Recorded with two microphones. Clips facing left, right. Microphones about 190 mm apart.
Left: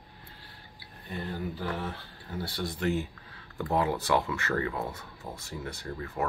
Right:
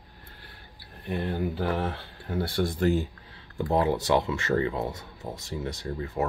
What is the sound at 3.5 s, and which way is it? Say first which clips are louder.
Speech: right 4 dB; 25° right (ahead or behind).